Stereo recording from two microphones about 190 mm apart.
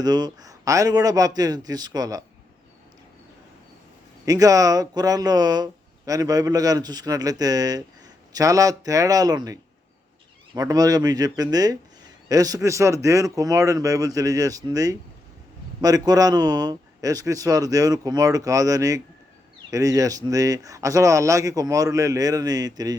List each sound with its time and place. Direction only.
0.0 s speech: 20° right (ahead or behind)
4.3 s speech: 20° right (ahead or behind)